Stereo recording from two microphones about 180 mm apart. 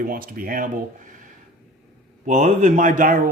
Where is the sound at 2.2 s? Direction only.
45° right (ahead or behind).